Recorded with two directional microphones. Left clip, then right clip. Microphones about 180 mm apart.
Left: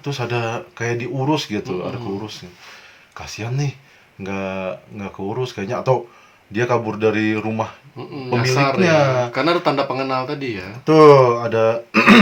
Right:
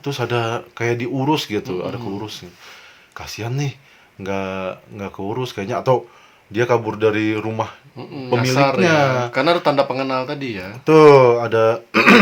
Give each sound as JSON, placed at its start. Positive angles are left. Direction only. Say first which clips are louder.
{"t": 0.0, "sound": "speech", "louder": "right 2 dB", "side_deg": -40}
{"t": 3.2, "sound": "speech", "louder": "right 1 dB", "side_deg": -40}
{"t": 7.9, "sound": "speech", "louder": "right 2 dB", "side_deg": -25}
{"t": 10.8, "sound": "speech", "louder": "right 1 dB", "side_deg": -40}